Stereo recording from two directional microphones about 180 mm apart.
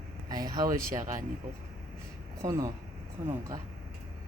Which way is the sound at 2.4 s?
20° right (ahead or behind).